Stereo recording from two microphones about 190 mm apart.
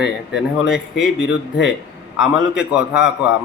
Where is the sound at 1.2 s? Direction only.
60° left (ahead or behind).